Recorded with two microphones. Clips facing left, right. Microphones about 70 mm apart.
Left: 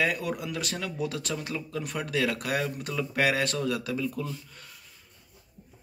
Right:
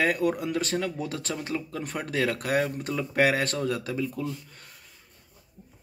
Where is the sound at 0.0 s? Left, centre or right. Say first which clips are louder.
Right 4 dB; right.